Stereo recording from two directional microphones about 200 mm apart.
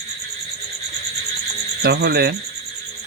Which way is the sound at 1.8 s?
55° right (ahead or behind).